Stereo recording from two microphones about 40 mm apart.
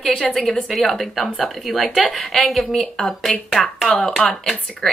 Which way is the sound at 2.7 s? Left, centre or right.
Centre.